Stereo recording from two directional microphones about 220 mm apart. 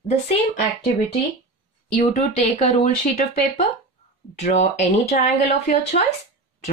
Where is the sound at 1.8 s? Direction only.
35° left (ahead or behind).